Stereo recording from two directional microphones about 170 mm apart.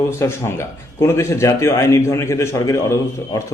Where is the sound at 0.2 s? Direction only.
15° left (ahead or behind).